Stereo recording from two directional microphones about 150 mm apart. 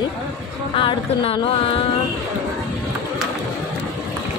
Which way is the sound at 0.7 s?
40° left (ahead or behind).